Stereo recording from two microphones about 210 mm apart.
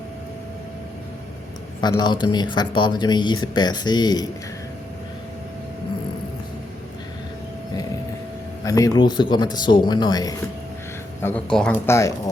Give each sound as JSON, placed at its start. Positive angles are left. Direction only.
{"t": 1.8, "sound": "speech", "side_deg": 20}
{"t": 8.6, "sound": "speech", "side_deg": 15}
{"t": 11.2, "sound": "speech", "side_deg": 10}